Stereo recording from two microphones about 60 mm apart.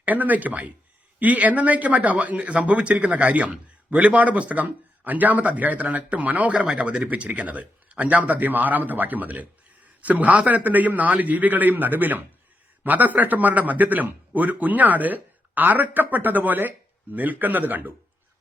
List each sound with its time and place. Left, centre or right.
0.0 s speech: right